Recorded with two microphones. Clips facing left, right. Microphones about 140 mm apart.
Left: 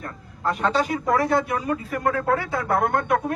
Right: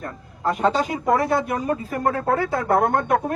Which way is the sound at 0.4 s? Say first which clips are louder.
Right 2 dB; 40° right (ahead or behind).